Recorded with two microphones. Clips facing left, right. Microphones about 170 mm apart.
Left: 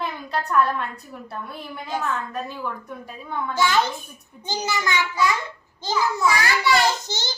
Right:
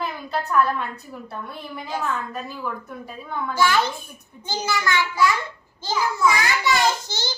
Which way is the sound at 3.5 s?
20° left (ahead or behind).